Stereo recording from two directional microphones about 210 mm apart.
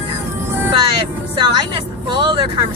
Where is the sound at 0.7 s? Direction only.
20° right (ahead or behind).